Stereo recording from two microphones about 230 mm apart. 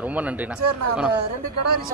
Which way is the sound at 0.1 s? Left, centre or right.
Centre.